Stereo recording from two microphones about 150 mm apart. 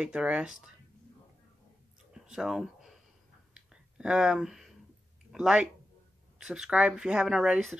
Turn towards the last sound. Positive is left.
turn(degrees=-5)  # may be behind; listen again after turning